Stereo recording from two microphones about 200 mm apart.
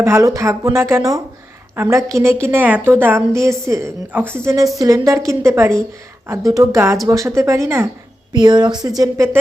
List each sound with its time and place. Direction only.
0.0 s a woman's voice: 15° right (ahead or behind)